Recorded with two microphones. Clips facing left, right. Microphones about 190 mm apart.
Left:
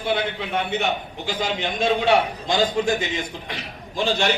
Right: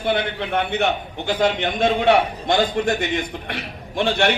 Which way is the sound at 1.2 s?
60° right (ahead or behind).